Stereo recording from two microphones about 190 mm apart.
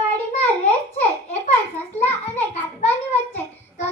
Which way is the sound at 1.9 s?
35° left (ahead or behind).